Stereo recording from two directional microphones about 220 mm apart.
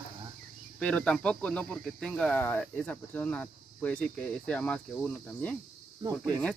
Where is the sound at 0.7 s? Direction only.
5° left (ahead or behind).